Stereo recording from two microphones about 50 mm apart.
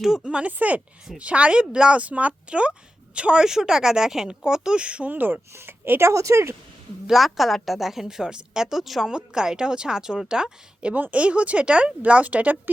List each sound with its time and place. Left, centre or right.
0.2 s speech: right
2.0 s a woman's voice: right
5.1 s speech: right
5.5 s speech: right
6.1 s speech: right
7.1 s a woman's voice: centre
10.9 s speech: right